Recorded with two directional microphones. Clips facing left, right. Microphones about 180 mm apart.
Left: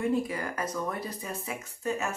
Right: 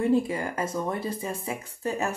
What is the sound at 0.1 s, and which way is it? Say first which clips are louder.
Speech: right 5 dB; 25° right (ahead or behind).